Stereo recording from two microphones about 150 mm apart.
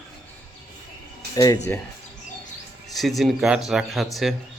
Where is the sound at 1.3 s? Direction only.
25° left (ahead or behind).